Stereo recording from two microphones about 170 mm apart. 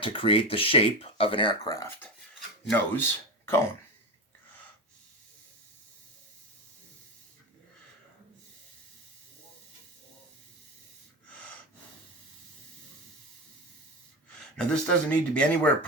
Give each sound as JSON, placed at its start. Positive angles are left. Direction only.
{"t": 0.0, "sound": "speech", "side_deg": 30}
{"t": 14.5, "sound": "speech", "side_deg": 5}